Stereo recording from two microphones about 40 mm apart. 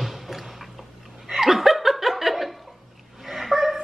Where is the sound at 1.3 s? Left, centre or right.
Centre.